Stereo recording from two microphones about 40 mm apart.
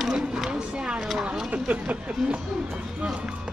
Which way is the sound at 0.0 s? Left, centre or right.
Centre.